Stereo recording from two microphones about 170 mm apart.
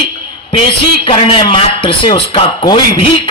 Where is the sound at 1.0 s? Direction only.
30° left (ahead or behind).